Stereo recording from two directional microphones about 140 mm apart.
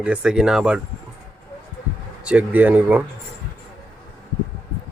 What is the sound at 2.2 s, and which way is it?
Speech, 10° right (ahead or behind).